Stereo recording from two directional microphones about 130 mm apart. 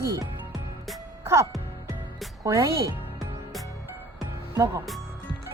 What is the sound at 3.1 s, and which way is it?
Music, centre (ahead or behind).